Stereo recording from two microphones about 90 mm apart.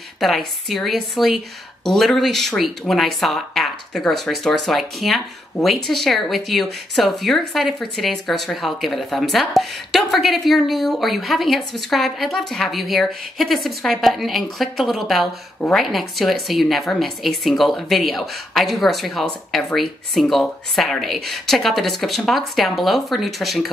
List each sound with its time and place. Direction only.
0.2 s speech: centre (ahead or behind)